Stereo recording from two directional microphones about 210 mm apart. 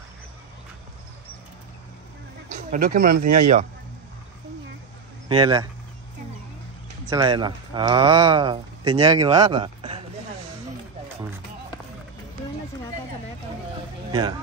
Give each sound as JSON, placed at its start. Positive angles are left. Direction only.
{"t": 2.7, "sound": "speech", "side_deg": -40}
{"t": 5.3, "sound": "speech", "side_deg": -20}
{"t": 7.1, "sound": "speech", "side_deg": -20}